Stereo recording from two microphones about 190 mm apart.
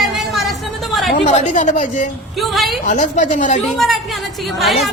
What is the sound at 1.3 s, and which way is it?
Speech, 40° left (ahead or behind).